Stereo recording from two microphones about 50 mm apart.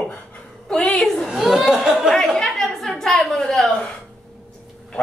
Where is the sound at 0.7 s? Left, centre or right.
Centre.